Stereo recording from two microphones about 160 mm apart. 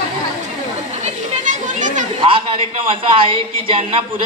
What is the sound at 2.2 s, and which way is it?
Speech, 35° right (ahead or behind).